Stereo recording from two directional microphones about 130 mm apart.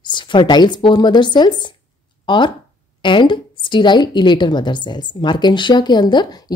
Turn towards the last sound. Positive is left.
turn(degrees=35)  # may be behind; listen again after turning